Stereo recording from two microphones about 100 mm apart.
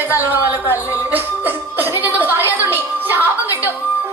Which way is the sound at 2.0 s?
20° right (ahead or behind).